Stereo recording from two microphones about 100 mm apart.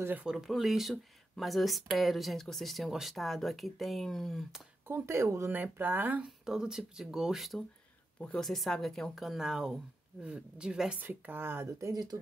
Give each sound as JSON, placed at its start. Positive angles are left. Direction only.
{"t": 0.2, "sound": "speech", "side_deg": -5}
{"t": 4.8, "sound": "speech", "side_deg": -25}
{"t": 5.6, "sound": "speech", "side_deg": -20}
{"t": 6.2, "sound": "speech", "side_deg": -5}
{"t": 11.0, "sound": "speech", "side_deg": -20}
{"t": 11.9, "sound": "speech", "side_deg": -40}